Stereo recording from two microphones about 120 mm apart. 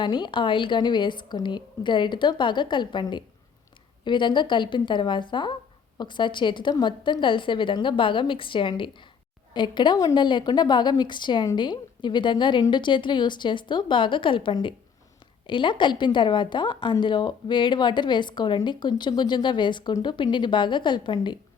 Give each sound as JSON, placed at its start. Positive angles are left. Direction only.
{"t": 0.0, "sound": "a woman's voice", "side_deg": 40}